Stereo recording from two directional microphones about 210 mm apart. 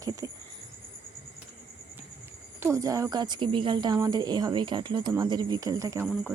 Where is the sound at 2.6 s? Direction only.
15° right (ahead or behind).